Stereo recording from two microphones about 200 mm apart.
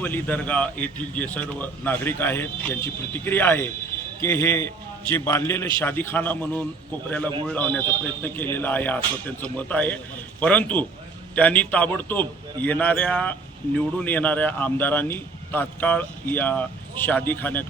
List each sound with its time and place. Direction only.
0.0 s a man's voice: 10° left (ahead or behind)